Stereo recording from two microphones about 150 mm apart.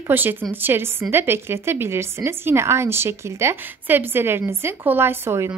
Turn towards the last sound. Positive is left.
turn(degrees=-15)  # may be behind; listen again after turning